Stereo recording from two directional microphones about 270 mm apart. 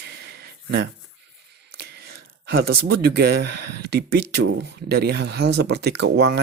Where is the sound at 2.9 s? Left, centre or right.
Right.